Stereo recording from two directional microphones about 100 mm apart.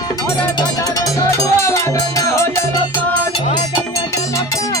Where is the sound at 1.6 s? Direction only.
30° left (ahead or behind).